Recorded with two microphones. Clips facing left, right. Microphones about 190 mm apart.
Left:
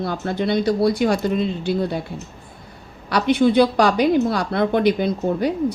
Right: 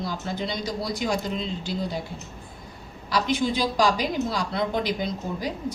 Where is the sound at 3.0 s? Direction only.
60° left (ahead or behind).